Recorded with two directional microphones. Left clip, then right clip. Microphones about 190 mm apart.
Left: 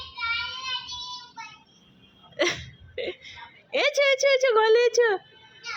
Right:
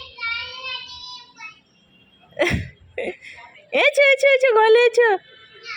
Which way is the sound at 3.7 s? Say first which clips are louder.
Right 7 dB; 25° right (ahead or behind).